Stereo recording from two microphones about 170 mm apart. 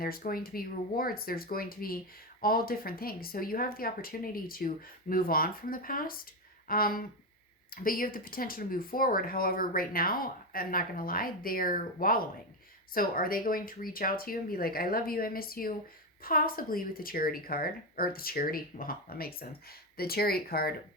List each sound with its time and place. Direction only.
0.0 s speech: 60° left (ahead or behind)